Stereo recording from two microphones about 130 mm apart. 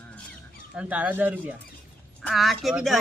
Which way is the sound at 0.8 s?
10° right (ahead or behind).